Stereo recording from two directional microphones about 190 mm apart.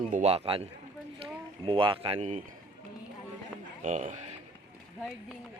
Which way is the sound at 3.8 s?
40° right (ahead or behind).